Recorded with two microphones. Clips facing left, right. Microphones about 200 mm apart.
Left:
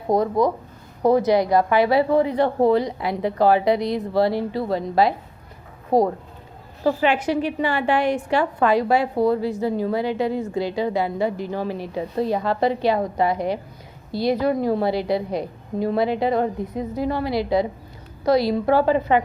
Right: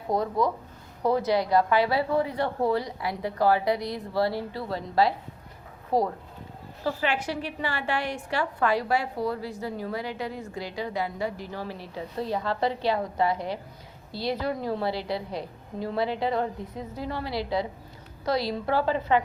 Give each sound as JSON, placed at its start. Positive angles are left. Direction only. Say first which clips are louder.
{"t": 0.1, "sound": "a woman's voice", "louder": "left 6 dB", "side_deg": 15}
{"t": 5.9, "sound": "speech", "louder": "left 7 dB", "side_deg": 45}
{"t": 6.8, "sound": "a woman's voice", "louder": "left 8 dB", "side_deg": 20}